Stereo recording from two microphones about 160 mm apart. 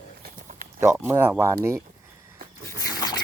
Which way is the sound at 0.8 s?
15° right (ahead or behind).